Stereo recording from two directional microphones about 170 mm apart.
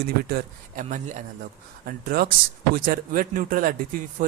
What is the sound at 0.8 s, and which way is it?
Speech, 45° right (ahead or behind).